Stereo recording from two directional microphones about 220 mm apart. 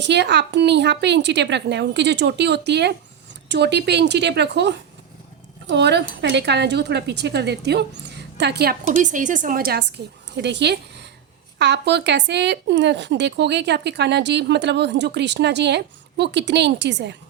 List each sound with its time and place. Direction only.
0.0 s speech: 50° right (ahead or behind)
9.0 s a woman's voice: 35° right (ahead or behind); by 17.2 s 50° right (ahead or behind)